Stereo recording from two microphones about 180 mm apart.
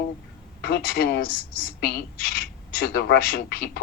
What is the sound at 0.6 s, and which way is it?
Speech, 55° left (ahead or behind).